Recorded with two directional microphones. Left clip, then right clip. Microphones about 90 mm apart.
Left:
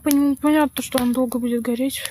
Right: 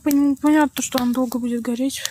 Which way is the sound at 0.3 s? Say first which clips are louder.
Right 1 dB; centre (ahead or behind).